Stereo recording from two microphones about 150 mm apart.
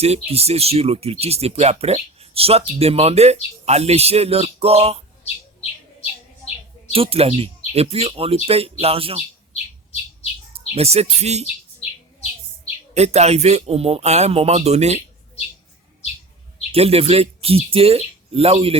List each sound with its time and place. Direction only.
0.0 s speech: 45° right (ahead or behind)
6.0 s chirp: 45° left (ahead or behind)
6.9 s speech: 40° right (ahead or behind)
10.8 s speech: 45° right (ahead or behind)
12.9 s speech: 45° right (ahead or behind)
16.7 s speech: 40° right (ahead or behind)